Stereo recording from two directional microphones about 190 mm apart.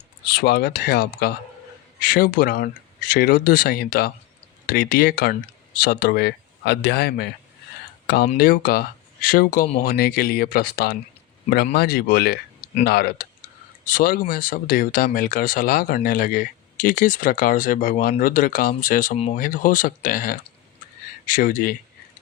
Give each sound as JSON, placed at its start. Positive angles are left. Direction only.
{"t": 0.3, "sound": "speech", "side_deg": 55}